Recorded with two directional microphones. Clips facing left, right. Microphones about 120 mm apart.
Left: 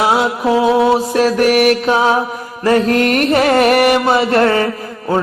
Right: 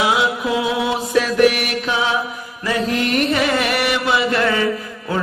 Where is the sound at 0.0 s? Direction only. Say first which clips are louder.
Left 4 dB; 40° left (ahead or behind).